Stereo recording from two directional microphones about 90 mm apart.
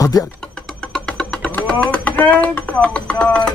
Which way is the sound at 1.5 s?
15° left (ahead or behind).